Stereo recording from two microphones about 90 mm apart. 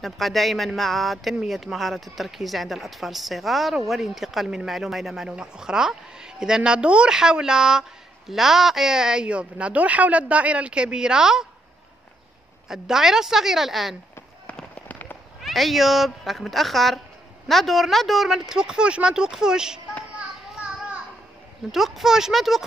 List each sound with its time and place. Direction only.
0.0 s speech: centre (ahead or behind)
12.6 s speech: 5° right (ahead or behind)
14.4 s fireworks: 15° left (ahead or behind)
15.4 s speech: centre (ahead or behind)
20.2 s a sound: 10° right (ahead or behind)
21.7 s speech: 5° right (ahead or behind)